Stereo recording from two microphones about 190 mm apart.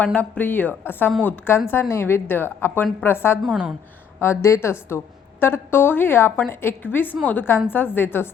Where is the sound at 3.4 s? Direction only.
5° right (ahead or behind).